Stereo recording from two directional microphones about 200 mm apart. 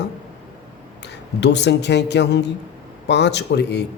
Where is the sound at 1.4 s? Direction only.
60° left (ahead or behind).